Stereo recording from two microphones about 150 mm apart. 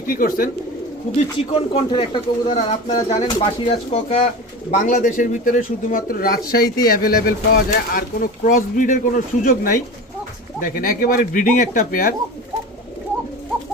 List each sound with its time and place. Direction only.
0.0 s speech: 70° left (ahead or behind)
1.5 s speech: 35° left (ahead or behind)
4.7 s speech: 60° left (ahead or behind)